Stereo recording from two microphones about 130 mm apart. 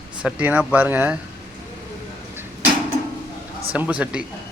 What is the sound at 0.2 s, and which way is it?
Speech, 10° right (ahead or behind).